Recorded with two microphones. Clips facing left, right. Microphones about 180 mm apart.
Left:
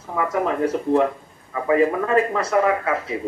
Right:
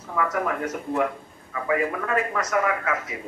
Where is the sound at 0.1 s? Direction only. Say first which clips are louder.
Left 3 dB; 25° left (ahead or behind).